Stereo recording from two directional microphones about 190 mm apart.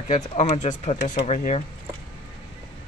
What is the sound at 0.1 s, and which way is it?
Speech, 40° left (ahead or behind).